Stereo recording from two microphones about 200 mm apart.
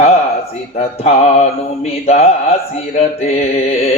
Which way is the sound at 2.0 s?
30° left (ahead or behind).